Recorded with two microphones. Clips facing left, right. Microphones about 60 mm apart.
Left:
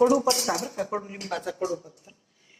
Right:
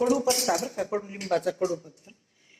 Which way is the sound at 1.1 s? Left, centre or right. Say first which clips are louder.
Right 5 dB; right.